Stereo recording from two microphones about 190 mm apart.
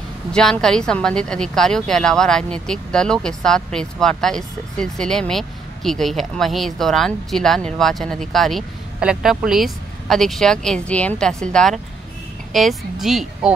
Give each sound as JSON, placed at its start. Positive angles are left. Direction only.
{"t": 0.3, "sound": "a woman's voice", "side_deg": 5}